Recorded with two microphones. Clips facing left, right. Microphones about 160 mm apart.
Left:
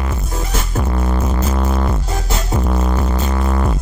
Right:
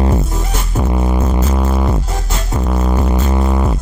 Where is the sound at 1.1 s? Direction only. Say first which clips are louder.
Right 3 dB; 10° right (ahead or behind).